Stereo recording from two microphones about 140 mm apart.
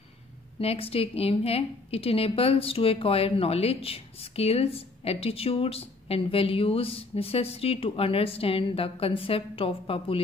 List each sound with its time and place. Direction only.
0.6 s a woman's voice: 45° left (ahead or behind)